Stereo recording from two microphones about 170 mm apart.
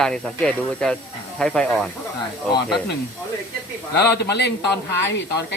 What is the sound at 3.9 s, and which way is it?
Speech, 75° left (ahead or behind).